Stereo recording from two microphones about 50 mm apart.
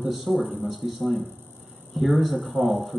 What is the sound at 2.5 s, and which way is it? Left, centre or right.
Speech, right.